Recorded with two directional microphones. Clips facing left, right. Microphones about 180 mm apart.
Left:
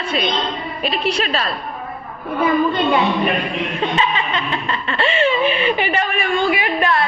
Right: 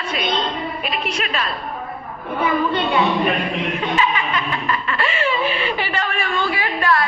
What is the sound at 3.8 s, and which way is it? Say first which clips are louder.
Chuckle: left 2 dB; 25° left (ahead or behind).